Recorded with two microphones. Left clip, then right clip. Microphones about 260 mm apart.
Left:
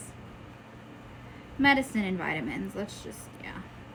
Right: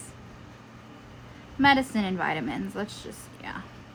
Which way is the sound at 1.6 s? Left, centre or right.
Centre.